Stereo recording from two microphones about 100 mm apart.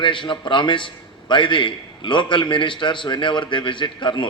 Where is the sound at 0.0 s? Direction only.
55° left (ahead or behind).